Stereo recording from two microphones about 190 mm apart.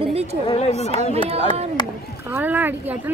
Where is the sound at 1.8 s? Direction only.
20° left (ahead or behind).